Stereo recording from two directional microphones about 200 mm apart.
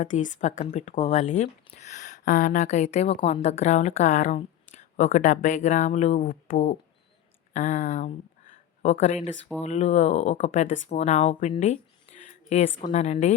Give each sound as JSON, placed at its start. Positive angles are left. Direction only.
{"t": 0.0, "sound": "speech", "side_deg": 40}